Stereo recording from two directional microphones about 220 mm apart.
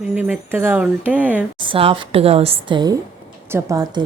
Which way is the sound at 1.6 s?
25° right (ahead or behind).